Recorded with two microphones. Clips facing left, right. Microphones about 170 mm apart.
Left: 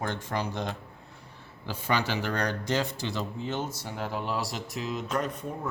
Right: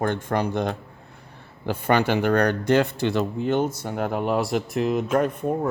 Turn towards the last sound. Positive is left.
turn(degrees=-55)  # may be behind; listen again after turning